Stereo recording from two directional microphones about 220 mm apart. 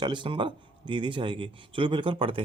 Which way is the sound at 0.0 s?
20° right (ahead or behind).